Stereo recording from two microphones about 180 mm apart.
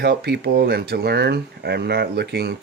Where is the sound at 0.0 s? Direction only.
65° right (ahead or behind).